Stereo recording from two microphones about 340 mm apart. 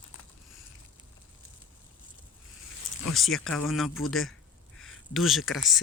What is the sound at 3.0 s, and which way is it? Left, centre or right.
Speech, centre.